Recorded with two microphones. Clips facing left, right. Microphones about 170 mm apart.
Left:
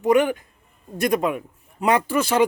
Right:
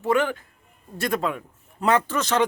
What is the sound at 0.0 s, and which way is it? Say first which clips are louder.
Speech: left 4 dB; 15° left (ahead or behind).